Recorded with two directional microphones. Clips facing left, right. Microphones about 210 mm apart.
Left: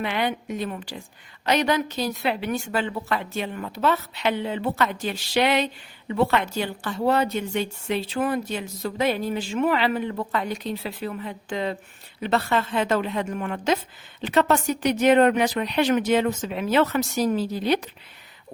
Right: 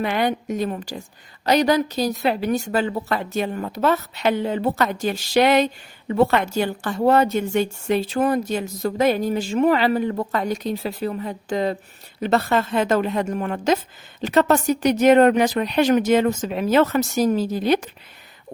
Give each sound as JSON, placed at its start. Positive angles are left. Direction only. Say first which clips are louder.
{"t": 0.0, "sound": "a woman's voice", "louder": "right 4 dB", "side_deg": -45}